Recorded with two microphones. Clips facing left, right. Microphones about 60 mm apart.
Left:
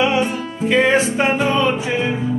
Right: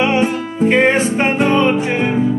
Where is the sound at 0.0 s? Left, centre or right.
Right.